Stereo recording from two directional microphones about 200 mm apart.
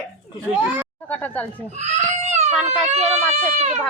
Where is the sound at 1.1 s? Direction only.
10° left (ahead or behind).